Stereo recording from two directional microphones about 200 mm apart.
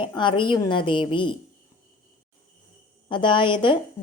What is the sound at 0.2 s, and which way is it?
Speech, 25° left (ahead or behind).